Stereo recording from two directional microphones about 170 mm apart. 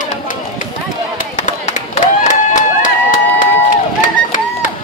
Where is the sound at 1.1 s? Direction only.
45° left (ahead or behind).